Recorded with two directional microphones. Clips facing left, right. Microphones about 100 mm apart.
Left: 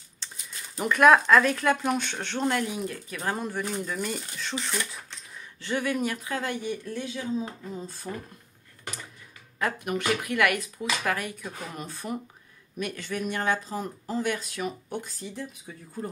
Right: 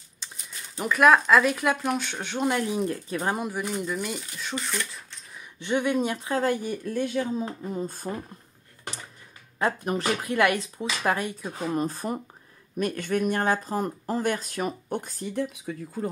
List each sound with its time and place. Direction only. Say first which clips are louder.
0.2 s a sound: even; 10° right (ahead or behind)
0.7 s speech: even; centre (ahead or behind)
2.6 s speech: right 4 dB; 30° right (ahead or behind)
3.3 s speech: right 1 dB; 10° right (ahead or behind)
5.4 s speech: right 4 dB; 20° right (ahead or behind); by 8.1 s 50° right (ahead or behind)
9.6 s speech: right 3 dB; 30° right (ahead or behind); by 15.4 s 50° right (ahead or behind)
15.4 s speech: right 7 dB; 80° right